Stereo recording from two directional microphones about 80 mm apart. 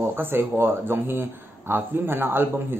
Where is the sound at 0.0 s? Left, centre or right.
Right.